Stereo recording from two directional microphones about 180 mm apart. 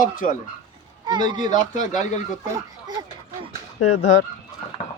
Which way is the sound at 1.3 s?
25° right (ahead or behind).